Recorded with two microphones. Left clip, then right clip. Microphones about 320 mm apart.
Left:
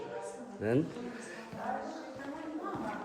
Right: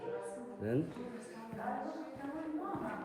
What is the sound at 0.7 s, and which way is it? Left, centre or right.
Speech, left.